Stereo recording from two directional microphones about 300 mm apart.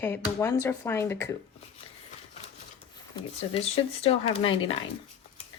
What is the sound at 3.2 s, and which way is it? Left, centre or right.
Speech, left.